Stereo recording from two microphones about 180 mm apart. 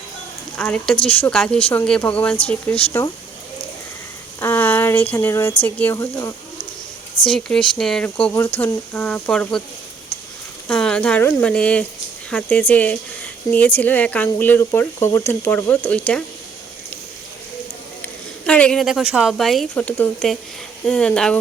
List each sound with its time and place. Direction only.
0.5 s speech: 5° left (ahead or behind)
4.4 s a sound: 15° left (ahead or behind)
5.1 s speech: 15° left (ahead or behind)
7.3 s speech: 5° left (ahead or behind)
10.7 s speech: 5° left (ahead or behind)
18.4 s speech: 5° left (ahead or behind)